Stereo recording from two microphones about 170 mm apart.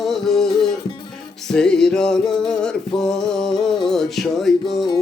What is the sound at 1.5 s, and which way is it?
Music, 5° left (ahead or behind).